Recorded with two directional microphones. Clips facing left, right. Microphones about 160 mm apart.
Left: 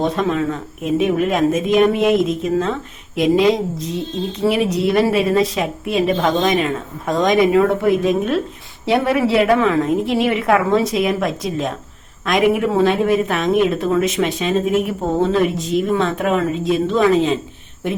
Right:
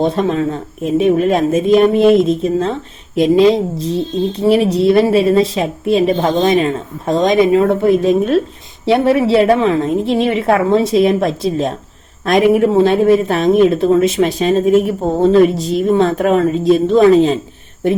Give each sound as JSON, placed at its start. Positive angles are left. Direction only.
{"t": 0.0, "sound": "a woman's voice", "side_deg": -30}